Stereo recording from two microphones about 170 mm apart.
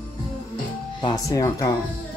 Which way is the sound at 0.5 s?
25° left (ahead or behind).